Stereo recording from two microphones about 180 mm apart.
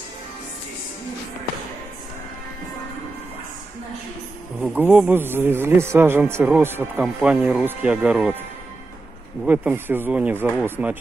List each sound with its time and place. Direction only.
4.6 s speech: 10° right (ahead or behind)
9.5 s speech: 10° right (ahead or behind)